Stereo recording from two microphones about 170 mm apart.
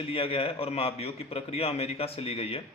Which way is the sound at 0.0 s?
35° left (ahead or behind).